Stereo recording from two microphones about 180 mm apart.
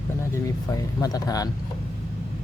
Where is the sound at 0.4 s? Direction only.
20° left (ahead or behind).